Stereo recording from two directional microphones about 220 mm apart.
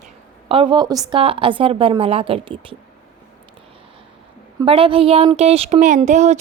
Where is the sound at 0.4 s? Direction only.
20° right (ahead or behind).